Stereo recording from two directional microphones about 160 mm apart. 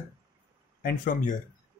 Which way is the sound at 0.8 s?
60° left (ahead or behind).